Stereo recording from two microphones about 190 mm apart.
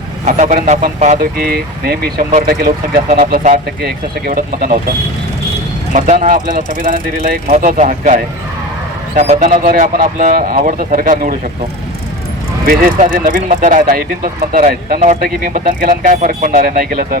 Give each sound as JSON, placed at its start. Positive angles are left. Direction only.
{"t": 0.3, "sound": "speech", "side_deg": -40}
{"t": 1.2, "sound": "speech", "side_deg": -50}
{"t": 5.9, "sound": "speech", "side_deg": -40}
{"t": 12.6, "sound": "speech", "side_deg": -45}